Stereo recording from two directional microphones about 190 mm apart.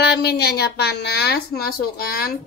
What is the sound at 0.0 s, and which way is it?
Speech, 60° left (ahead or behind).